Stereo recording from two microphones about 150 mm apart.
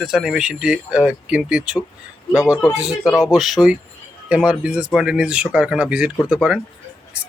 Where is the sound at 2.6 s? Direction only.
20° left (ahead or behind).